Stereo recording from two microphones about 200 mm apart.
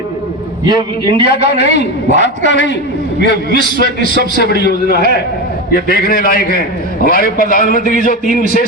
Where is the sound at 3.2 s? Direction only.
45° right (ahead or behind).